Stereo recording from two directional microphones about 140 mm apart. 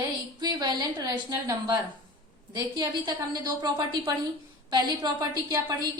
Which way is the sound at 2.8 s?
30° right (ahead or behind).